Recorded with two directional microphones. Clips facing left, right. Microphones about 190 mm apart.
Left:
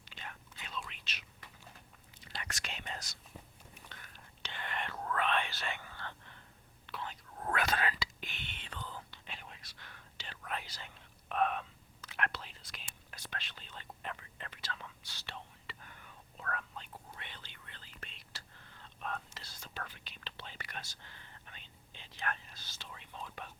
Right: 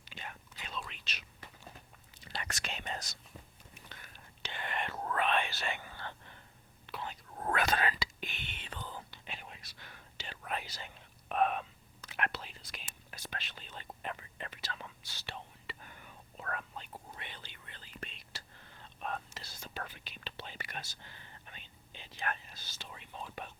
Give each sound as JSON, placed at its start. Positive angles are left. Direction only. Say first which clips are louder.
{"t": 0.0, "sound": "whispering", "louder": "right 2 dB", "side_deg": -10}
{"t": 0.7, "sound": "whispering", "louder": "right 1 dB", "side_deg": -40}
{"t": 2.6, "sound": "whispering", "louder": "right 3 dB", "side_deg": -25}
{"t": 4.4, "sound": "whispering", "louder": "right 2 dB", "side_deg": -15}
{"t": 7.3, "sound": "whispering", "louder": "right 2 dB", "side_deg": -30}
{"t": 19.5, "sound": "whispering", "louder": "right 3 dB", "side_deg": -10}